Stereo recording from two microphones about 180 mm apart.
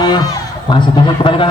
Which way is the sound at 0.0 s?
25° left (ahead or behind).